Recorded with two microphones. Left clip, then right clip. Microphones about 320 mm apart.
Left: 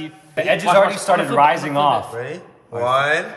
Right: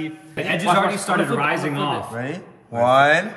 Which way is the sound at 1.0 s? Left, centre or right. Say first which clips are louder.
Left 6 dB; centre.